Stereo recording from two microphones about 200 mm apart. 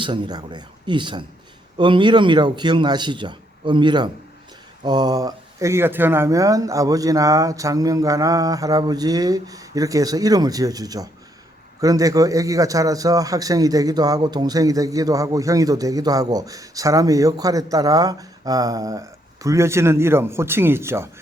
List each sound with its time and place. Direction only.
0.0 s a man's voice: 20° right (ahead or behind)